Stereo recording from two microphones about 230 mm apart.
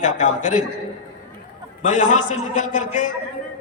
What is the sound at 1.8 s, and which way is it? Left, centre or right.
A man's voice, left.